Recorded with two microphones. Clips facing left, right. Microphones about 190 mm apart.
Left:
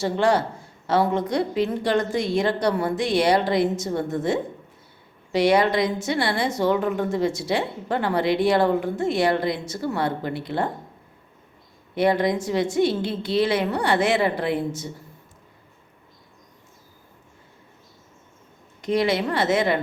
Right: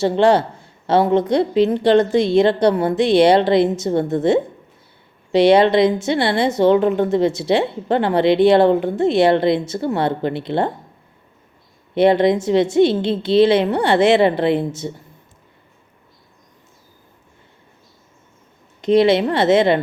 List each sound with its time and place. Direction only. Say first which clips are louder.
0.0 s a woman's voice: right 6 dB; 25° right (ahead or behind)
11.9 s a woman's voice: right 7 dB; 25° right (ahead or behind)
18.8 s a woman's voice: right 8 dB; 25° right (ahead or behind)